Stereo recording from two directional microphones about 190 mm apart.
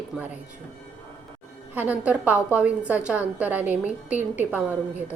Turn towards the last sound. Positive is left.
turn(degrees=-10)  # may be behind; listen again after turning